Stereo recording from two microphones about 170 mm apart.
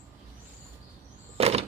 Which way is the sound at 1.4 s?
35° right (ahead or behind).